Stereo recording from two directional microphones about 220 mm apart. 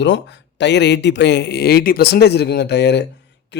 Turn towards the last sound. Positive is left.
turn(degrees=50)  # may be behind; listen again after turning